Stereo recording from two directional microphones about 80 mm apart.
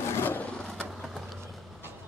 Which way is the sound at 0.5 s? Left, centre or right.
Centre.